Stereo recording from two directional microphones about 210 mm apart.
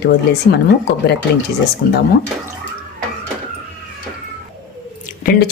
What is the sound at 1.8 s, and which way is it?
Speech, 55° left (ahead or behind).